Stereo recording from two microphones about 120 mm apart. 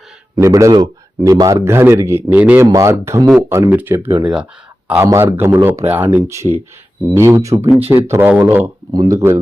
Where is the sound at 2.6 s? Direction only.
25° right (ahead or behind).